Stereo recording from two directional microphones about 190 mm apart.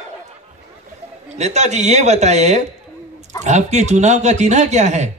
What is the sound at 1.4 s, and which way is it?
A man's voice, 35° right (ahead or behind).